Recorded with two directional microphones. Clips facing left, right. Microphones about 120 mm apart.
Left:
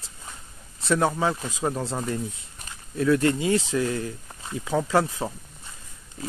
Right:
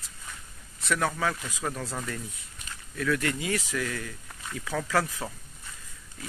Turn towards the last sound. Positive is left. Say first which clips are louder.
# left 8 dB
turn(degrees=25)  # may be behind; listen again after turning